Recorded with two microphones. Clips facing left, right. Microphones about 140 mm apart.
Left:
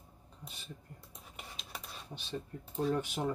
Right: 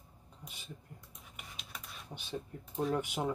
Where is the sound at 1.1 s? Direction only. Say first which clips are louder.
Left 4 dB; 30° left (ahead or behind).